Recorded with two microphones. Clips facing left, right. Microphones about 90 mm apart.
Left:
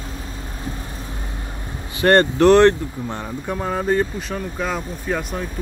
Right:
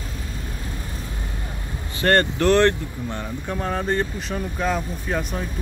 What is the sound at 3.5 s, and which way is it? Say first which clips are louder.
Speech: left 3 dB; 10° left (ahead or behind).